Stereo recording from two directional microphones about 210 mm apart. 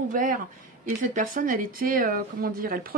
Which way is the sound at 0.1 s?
40° right (ahead or behind).